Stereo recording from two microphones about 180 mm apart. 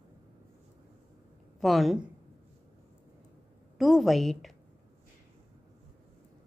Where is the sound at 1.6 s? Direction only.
Centre (ahead or behind).